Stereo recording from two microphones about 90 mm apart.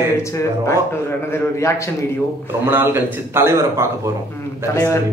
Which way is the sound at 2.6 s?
25° right (ahead or behind).